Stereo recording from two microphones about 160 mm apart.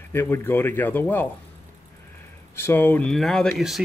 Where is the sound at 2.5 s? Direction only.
15° left (ahead or behind).